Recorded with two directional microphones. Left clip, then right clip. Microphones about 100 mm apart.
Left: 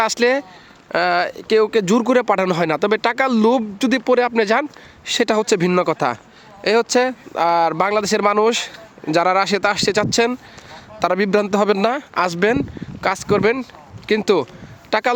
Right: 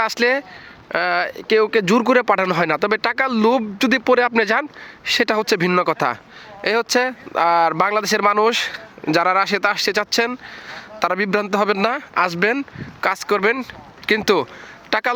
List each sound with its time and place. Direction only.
0.0 s speech: 30° left (ahead or behind)
0.9 s speech: 40° left (ahead or behind); by 4.6 s 20° left (ahead or behind)
5.0 s speech: 30° left (ahead or behind)
12.1 s speech: 55° left (ahead or behind)
13.0 s speech: 25° left (ahead or behind)